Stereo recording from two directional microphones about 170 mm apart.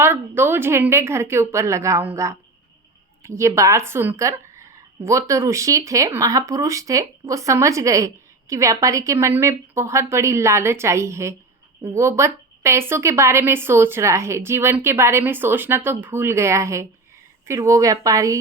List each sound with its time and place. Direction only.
0.0 s a woman's voice: 15° right (ahead or behind)